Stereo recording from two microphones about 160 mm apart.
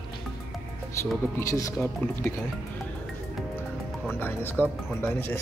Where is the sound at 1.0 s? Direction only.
15° left (ahead or behind).